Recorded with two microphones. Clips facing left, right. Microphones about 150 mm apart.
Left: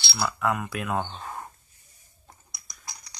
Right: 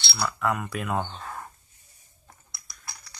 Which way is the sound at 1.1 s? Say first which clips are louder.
Left 1 dB; 20° left (ahead or behind).